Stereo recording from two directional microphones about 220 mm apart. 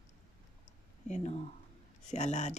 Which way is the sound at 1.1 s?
30° left (ahead or behind).